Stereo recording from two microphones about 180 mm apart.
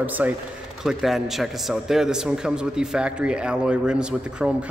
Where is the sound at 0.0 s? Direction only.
10° right (ahead or behind).